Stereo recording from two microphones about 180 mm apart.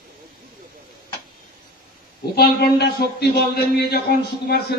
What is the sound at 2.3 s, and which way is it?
A man's voice, 60° left (ahead or behind).